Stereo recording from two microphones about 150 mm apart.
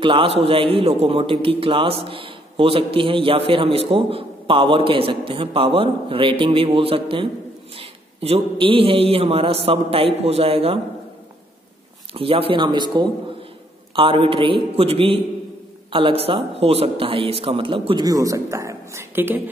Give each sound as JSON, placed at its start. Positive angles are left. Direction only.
{"t": 0.0, "sound": "a man's voice", "side_deg": -35}
{"t": 12.1, "sound": "a man's voice", "side_deg": -40}